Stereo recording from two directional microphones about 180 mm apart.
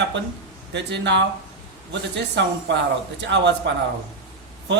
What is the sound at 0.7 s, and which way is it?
Speech, 75° right (ahead or behind).